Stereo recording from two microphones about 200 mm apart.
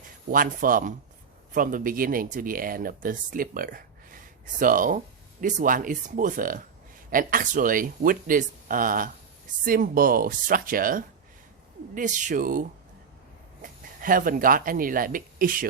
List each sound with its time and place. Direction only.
0.3 s speech: 45° right (ahead or behind)